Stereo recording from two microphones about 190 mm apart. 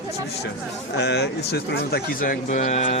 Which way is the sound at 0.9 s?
60° left (ahead or behind).